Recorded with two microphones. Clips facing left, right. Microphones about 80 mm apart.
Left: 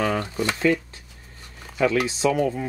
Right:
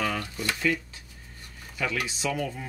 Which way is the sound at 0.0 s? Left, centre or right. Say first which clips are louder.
Left 6 dB; left.